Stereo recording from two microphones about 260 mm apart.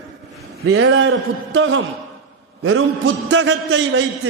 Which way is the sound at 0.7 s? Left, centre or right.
Right.